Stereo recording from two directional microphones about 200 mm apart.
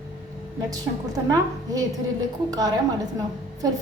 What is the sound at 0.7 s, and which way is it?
A woman's voice, 20° right (ahead or behind).